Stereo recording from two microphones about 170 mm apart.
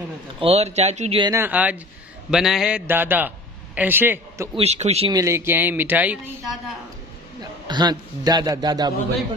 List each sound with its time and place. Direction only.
0.4 s speech: 35° right (ahead or behind)
1.2 s a man's voice: 15° right (ahead or behind)
4.6 s speech: 40° right (ahead or behind)
5.1 s speech: 15° right (ahead or behind)
7.6 s a man's voice: 25° right (ahead or behind)